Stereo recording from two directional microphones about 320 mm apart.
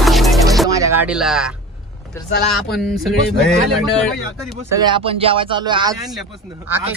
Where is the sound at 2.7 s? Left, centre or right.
Centre.